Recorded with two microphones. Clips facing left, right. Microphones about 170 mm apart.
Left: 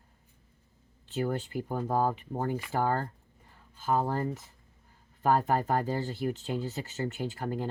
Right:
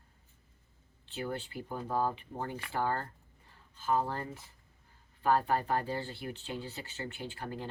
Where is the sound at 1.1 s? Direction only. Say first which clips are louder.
Left 7 dB; 40° left (ahead or behind).